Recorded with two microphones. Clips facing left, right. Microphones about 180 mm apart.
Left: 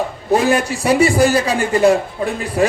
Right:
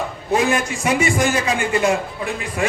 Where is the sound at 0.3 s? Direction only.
35° left (ahead or behind).